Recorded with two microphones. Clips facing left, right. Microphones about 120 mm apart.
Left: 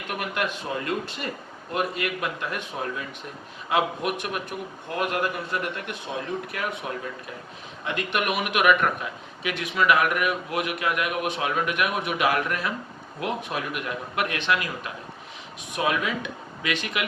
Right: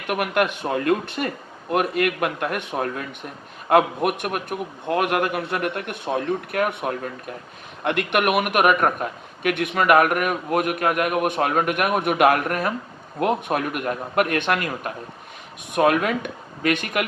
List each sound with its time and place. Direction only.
0.1 s a man's voice: 60° right (ahead or behind)